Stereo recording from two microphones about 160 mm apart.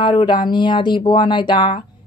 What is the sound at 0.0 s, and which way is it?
Speech, 30° left (ahead or behind).